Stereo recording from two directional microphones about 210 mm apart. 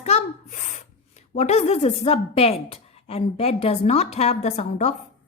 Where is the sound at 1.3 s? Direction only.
30° left (ahead or behind).